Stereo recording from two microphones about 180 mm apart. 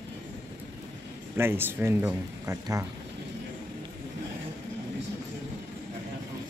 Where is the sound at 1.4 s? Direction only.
10° right (ahead or behind).